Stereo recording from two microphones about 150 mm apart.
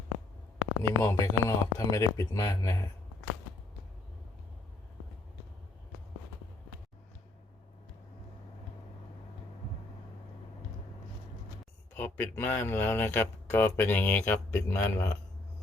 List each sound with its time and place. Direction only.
0.8 s speech: 20° left (ahead or behind)
11.9 s speech: 15° left (ahead or behind)